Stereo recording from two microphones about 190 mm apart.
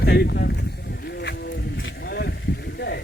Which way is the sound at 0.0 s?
60° left (ahead or behind).